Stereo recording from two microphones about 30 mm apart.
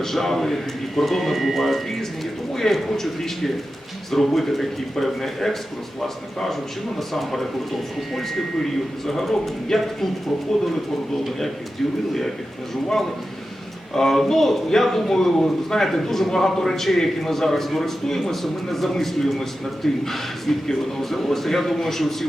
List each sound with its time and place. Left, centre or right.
0.0 s a man's voice: centre
13.9 s a man's voice: centre